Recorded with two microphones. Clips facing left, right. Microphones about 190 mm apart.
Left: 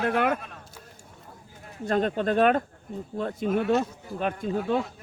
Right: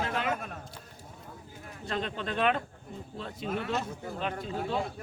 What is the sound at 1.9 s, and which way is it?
Speech, 45° left (ahead or behind).